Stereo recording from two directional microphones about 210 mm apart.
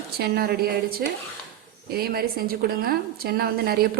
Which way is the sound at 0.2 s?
50° right (ahead or behind).